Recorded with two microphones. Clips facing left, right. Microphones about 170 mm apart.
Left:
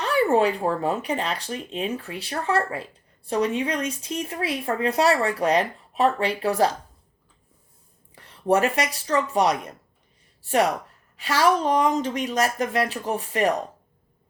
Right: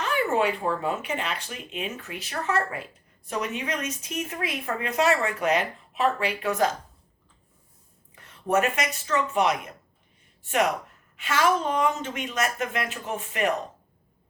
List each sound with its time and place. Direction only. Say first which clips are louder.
0.0 s speech: left 4 dB; 35° left (ahead or behind)
8.1 s speech: left 3 dB; 30° left (ahead or behind)